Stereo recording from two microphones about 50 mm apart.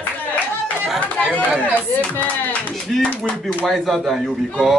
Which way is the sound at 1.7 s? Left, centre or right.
Left.